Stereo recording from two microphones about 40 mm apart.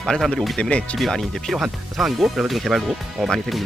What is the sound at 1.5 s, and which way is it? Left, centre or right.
Speech, centre.